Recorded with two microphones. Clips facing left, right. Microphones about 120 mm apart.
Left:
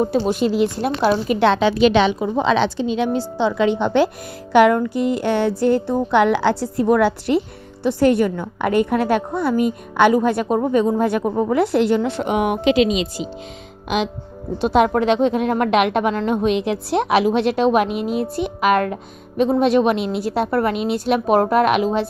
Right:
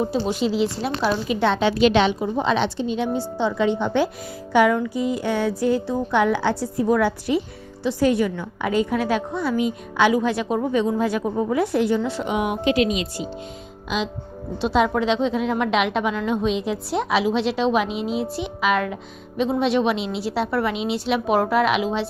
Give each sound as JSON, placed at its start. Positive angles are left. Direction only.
{"t": 0.0, "sound": "a woman's voice", "side_deg": 50}
{"t": 2.2, "sound": "a woman's voice", "side_deg": 90}
{"t": 12.6, "sound": "a woman's voice", "side_deg": 90}
{"t": 14.6, "sound": "a woman's voice", "side_deg": 50}